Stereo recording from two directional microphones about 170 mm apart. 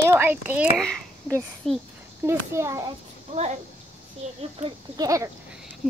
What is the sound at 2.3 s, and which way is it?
Speech, 15° right (ahead or behind).